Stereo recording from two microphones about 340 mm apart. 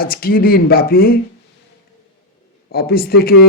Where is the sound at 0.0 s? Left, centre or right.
Left.